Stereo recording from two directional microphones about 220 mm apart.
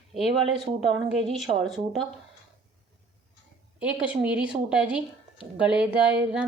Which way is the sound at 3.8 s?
5° right (ahead or behind).